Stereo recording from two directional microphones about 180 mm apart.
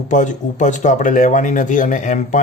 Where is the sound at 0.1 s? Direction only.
45° left (ahead or behind).